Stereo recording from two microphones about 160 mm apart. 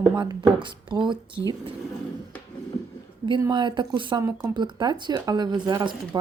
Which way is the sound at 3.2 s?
25° right (ahead or behind).